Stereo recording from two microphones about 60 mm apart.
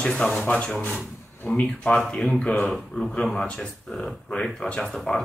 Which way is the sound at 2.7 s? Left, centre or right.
Centre.